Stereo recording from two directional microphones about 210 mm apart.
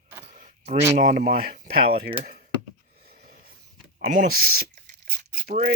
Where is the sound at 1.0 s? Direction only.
35° right (ahead or behind).